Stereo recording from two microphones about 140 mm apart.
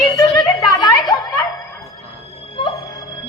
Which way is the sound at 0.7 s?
25° left (ahead or behind).